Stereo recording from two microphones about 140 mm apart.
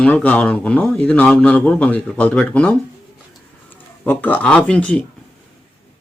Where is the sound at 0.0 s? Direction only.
10° left (ahead or behind).